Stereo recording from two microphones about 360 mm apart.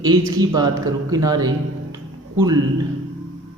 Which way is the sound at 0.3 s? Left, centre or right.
Centre.